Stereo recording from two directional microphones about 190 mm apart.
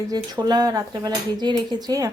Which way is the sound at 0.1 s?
20° right (ahead or behind).